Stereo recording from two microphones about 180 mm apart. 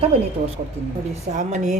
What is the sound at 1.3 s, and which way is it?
Speech, 45° right (ahead or behind).